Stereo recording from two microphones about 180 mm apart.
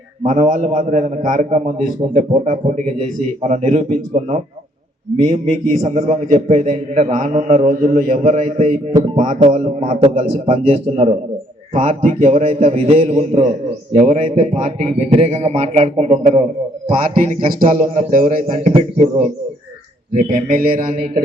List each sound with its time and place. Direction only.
0.3 s a man's voice: 40° right (ahead or behind)
9.8 s a man's voice: 30° right (ahead or behind)
17.5 s a man's voice: 50° right (ahead or behind)